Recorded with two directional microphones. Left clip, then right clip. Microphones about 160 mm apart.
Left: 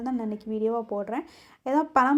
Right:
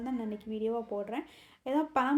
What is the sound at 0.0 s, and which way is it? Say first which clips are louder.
A woman's voice: left 6 dB; 30° left (ahead or behind).